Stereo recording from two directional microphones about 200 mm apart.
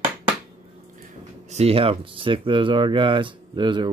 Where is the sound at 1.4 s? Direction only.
30° right (ahead or behind).